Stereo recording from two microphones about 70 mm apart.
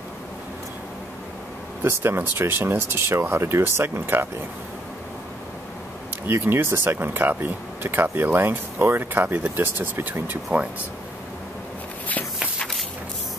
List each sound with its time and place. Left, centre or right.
1.8 s speech: right
6.2 s speech: right